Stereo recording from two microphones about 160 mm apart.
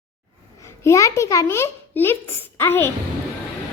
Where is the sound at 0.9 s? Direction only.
20° left (ahead or behind).